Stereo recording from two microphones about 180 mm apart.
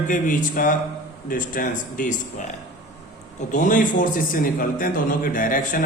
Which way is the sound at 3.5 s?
45° left (ahead or behind).